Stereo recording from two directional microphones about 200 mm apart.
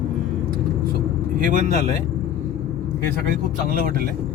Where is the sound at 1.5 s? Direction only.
40° right (ahead or behind).